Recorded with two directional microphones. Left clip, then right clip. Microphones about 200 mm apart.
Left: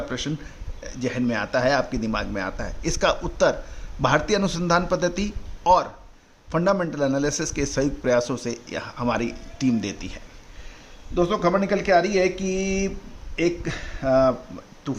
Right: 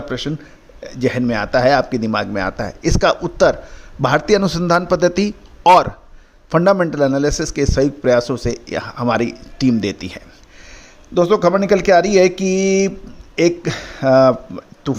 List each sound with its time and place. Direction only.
0.1 s a man's voice: 30° right (ahead or behind)
11.1 s speech: 45° right (ahead or behind)